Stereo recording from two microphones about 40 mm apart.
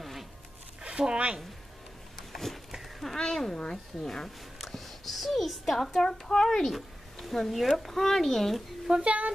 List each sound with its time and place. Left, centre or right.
0.0 s zipper: centre
0.8 s speech: right
2.1 s a sound: centre
3.2 s a child's voice: centre
8.9 s speech: right